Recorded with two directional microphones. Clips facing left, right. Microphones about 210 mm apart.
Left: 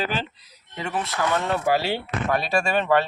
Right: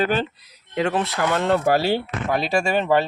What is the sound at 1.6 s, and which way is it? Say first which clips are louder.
Speech: right 4 dB; 45° right (ahead or behind).